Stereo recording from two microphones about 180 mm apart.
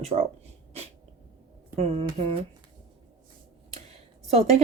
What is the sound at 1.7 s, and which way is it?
Speech, 35° right (ahead or behind).